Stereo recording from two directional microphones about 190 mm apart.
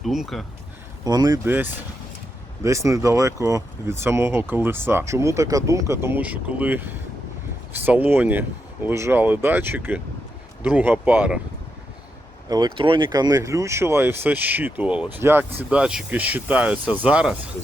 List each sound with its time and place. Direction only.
0.0 s speech: centre (ahead or behind)
1.0 s speech: 20° right (ahead or behind)
2.6 s speech: 15° right (ahead or behind)
12.5 s speech: 20° right (ahead or behind); by 17.3 s 5° right (ahead or behind)